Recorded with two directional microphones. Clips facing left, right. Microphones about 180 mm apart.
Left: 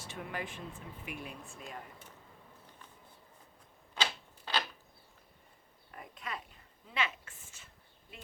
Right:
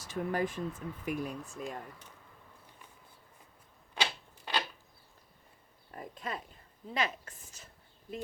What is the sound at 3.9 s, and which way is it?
Typewriter, 15° right (ahead or behind).